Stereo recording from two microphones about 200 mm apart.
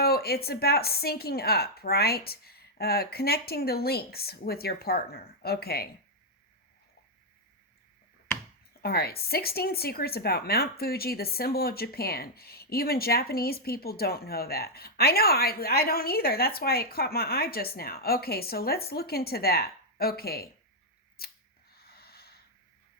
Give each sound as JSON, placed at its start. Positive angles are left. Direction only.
{"t": 0.0, "sound": "speech", "side_deg": 50}
{"t": 8.8, "sound": "speech", "side_deg": 50}
{"t": 21.2, "sound": "camera", "side_deg": 50}
{"t": 21.7, "sound": "snort", "side_deg": 50}